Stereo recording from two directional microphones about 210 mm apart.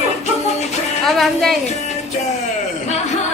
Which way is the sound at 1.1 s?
Centre (ahead or behind).